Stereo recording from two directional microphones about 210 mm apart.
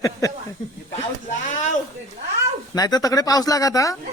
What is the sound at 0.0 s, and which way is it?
Speech, 15° left (ahead or behind).